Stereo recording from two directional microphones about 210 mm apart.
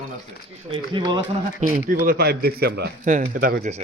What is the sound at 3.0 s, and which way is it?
Speech, 40° right (ahead or behind).